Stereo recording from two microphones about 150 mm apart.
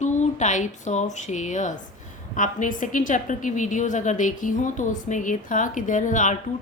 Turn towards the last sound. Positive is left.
turn(degrees=55)  # may be behind; listen again after turning